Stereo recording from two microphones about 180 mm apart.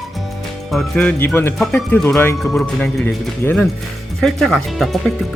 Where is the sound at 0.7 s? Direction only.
5° left (ahead or behind).